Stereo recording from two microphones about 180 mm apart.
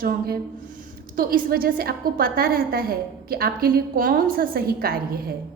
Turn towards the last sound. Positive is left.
turn(degrees=-55)  # may be behind; listen again after turning